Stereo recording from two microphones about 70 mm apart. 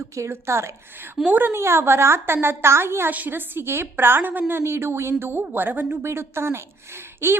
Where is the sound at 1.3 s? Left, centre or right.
Right.